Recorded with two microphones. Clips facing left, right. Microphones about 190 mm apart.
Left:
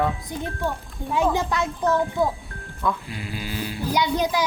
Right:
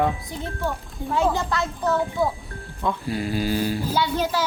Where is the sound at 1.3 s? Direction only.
15° left (ahead or behind).